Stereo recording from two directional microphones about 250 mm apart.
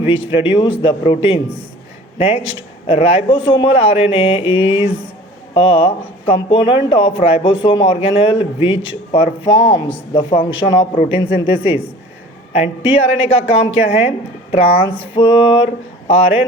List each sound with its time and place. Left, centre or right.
0.0 s speech: left
10.9 s a man's voice: left
11.3 s speech: left
12.8 s speech: left